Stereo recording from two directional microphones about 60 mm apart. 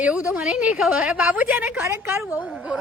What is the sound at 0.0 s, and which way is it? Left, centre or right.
A woman's voice, centre.